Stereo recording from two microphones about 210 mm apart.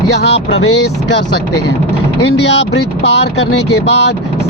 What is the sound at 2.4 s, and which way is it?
Speech, 55° left (ahead or behind).